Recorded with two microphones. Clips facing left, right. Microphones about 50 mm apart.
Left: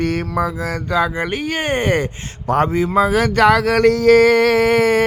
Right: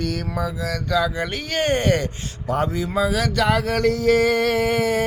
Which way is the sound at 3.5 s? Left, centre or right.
Left.